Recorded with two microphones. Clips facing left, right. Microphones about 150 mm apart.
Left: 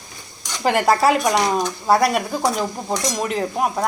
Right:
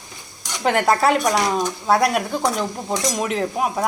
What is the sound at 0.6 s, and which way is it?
A woman's voice, 5° left (ahead or behind).